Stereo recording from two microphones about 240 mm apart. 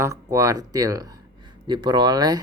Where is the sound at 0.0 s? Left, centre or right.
Centre.